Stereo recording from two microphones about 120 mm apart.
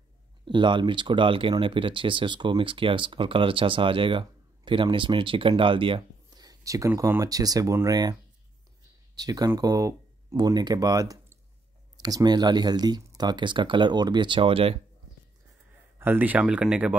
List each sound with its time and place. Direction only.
0.5 s speech: 40° right (ahead or behind)
6.3 s a sound: 30° right (ahead or behind)
7.0 s speech: 25° right (ahead or behind); by 14.8 s 50° right (ahead or behind)
16.0 s speech: 15° right (ahead or behind)